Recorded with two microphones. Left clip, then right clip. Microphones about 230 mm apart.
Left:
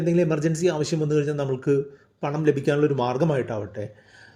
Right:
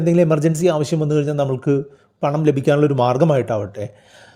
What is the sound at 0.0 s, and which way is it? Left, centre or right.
Speech, right.